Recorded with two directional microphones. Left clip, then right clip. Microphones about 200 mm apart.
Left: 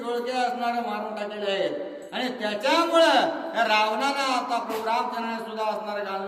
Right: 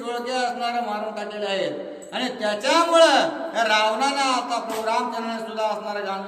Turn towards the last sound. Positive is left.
turn(degrees=-10)  # may be behind; listen again after turning